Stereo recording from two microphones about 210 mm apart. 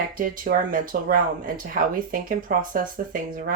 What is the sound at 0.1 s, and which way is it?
Speech, 40° right (ahead or behind).